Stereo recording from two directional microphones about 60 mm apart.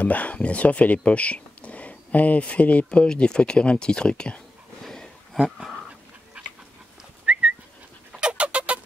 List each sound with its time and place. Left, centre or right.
0.0 s speech: left
4.8 s a sound: centre
5.4 s dog: centre
7.3 s whistling: centre
8.1 s dog: centre